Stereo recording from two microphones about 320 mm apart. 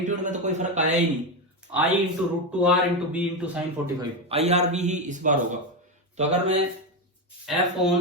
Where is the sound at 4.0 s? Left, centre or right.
Centre.